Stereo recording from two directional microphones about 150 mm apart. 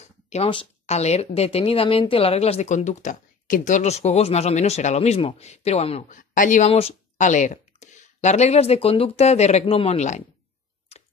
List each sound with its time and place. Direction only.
0.0 s speech: 45° left (ahead or behind)
6.7 s speech: 40° left (ahead or behind)
10.9 s tick-tock: 45° left (ahead or behind)